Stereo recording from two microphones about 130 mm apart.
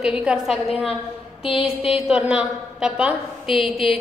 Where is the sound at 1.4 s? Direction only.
45° left (ahead or behind).